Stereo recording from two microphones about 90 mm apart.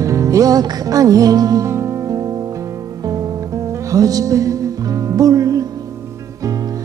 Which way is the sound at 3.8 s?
40° right (ahead or behind).